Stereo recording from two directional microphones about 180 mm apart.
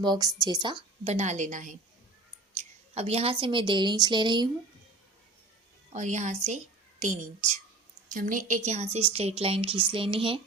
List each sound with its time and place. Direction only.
0.0 s a woman's voice: 25° right (ahead or behind); by 1.7 s 45° right (ahead or behind)
2.9 s speech: 35° right (ahead or behind)
5.9 s a woman's voice: 40° right (ahead or behind)